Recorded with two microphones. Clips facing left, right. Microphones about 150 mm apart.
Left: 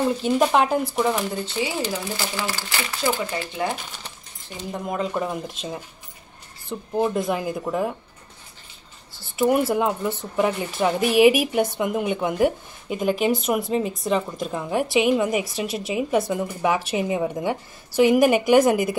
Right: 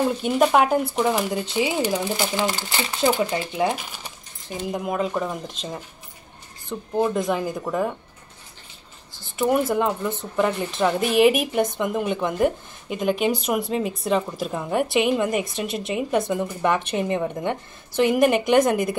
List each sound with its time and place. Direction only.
0.2 s speech: 5° right (ahead or behind)
4.7 s speech: 5° right (ahead or behind)
9.4 s speech: 5° left (ahead or behind)